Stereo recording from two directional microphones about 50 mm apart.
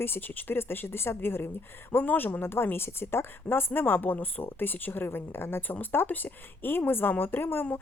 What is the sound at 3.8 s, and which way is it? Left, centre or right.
A woman's voice, left.